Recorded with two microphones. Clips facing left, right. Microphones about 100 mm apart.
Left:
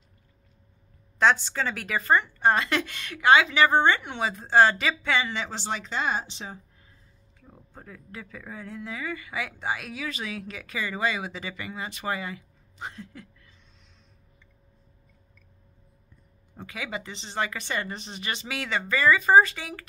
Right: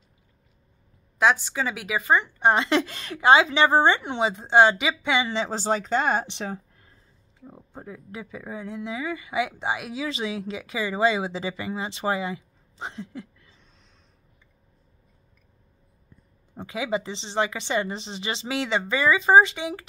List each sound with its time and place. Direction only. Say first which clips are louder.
1.1 s speech: right 1 dB; 10° right (ahead or behind)
5.3 s speech: right 6 dB; 30° right (ahead or behind)
5.6 s speech: right 8 dB; 40° right (ahead or behind); by 6.9 s 65° right (ahead or behind)
7.3 s speech: right 6 dB; 20° right (ahead or behind)
16.5 s speech: right 8 dB; 25° right (ahead or behind)